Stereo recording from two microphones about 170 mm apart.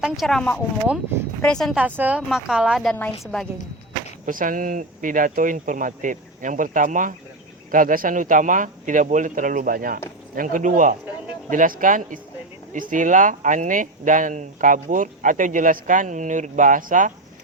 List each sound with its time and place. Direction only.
0.0 s a woman's voice: centre (ahead or behind)
4.3 s speech: 55° right (ahead or behind)